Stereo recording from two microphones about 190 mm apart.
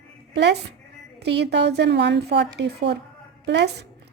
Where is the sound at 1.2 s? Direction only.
60° right (ahead or behind).